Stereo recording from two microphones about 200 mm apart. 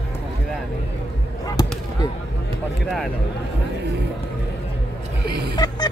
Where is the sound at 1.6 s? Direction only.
20° left (ahead or behind).